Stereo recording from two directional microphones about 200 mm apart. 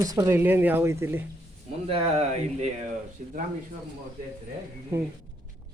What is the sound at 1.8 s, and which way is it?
Speech, 30° right (ahead or behind).